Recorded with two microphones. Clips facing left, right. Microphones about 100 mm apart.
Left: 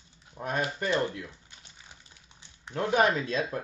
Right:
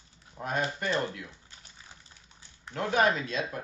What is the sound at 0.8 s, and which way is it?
Speech, 30° left (ahead or behind).